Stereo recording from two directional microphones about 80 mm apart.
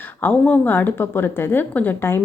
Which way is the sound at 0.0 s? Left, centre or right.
Left.